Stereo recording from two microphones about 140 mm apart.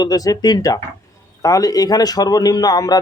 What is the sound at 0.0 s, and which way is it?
A man's voice, 25° left (ahead or behind).